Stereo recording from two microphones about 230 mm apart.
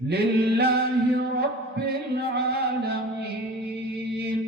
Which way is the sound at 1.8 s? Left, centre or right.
Right.